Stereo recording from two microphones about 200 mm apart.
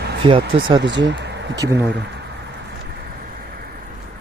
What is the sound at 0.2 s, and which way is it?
Speech, 25° right (ahead or behind).